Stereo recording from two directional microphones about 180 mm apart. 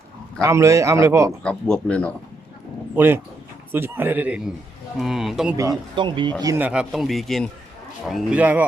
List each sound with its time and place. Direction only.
0.4 s a man's voice: 15° right (ahead or behind)
1.5 s speech: 5° left (ahead or behind)
2.9 s a man's voice: 10° right (ahead or behind)
5.5 s a man's voice: 20° right (ahead or behind)
6.7 s a man's voice: 5° right (ahead or behind)